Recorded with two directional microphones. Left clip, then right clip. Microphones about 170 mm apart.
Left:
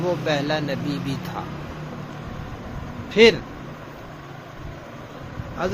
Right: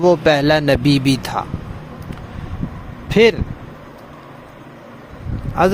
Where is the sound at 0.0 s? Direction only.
75° right (ahead or behind).